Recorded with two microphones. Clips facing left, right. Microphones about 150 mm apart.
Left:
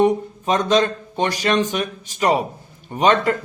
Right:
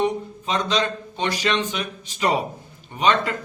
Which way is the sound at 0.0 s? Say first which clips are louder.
Left 6 dB; 45° left (ahead or behind).